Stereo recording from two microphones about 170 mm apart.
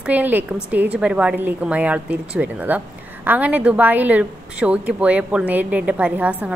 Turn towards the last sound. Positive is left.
turn(degrees=-10)  # may be behind; listen again after turning